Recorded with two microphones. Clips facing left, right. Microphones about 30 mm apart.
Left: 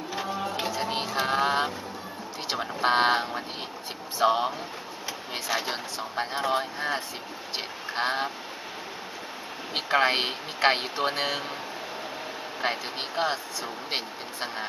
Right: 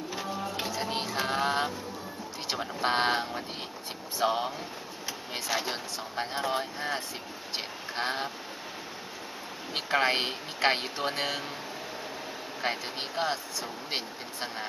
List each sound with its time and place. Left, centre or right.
0.1 s music: centre
2.5 s speech: centre
7.9 s duck: centre
9.8 s speech: centre
12.6 s speech: centre